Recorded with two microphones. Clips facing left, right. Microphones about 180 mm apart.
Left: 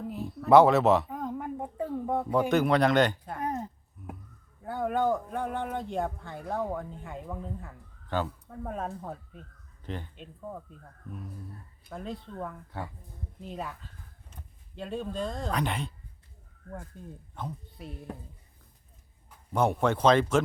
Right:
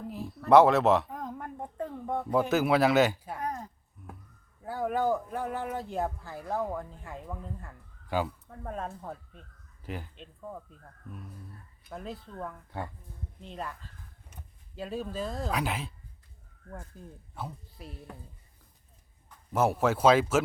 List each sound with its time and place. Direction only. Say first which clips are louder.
0.1 s a sound: left 1 dB; centre (ahead or behind)
2.5 s speech: left 1 dB; 5° right (ahead or behind)
3.4 s a sound: left 4 dB; 25° left (ahead or behind)
4.6 s speech: left 1 dB; centre (ahead or behind)
8.0 s speech: right 1 dB; 10° right (ahead or behind)
8.4 s speech: left 2 dB; 5° left (ahead or behind)
9.8 s speech: left 1 dB; 5° right (ahead or behind)
16.9 s speech: even; centre (ahead or behind)
19.5 s speech: even; 5° right (ahead or behind)